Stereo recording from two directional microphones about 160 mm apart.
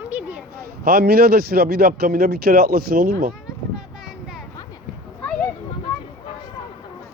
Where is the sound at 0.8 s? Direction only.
75° right (ahead or behind).